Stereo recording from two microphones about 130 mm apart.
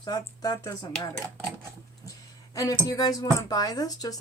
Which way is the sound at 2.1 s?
25° left (ahead or behind).